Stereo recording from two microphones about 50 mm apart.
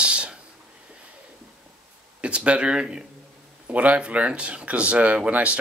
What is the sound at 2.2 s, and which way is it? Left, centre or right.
Speech, right.